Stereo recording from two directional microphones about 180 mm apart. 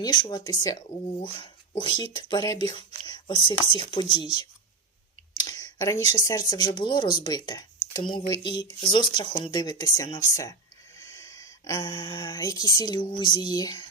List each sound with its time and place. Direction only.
0.0 s speech: 25° left (ahead or behind)